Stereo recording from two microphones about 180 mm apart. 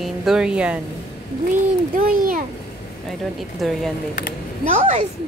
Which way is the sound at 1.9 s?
50° right (ahead or behind).